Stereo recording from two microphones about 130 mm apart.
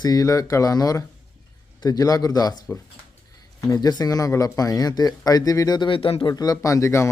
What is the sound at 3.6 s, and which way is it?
Speech, 30° left (ahead or behind).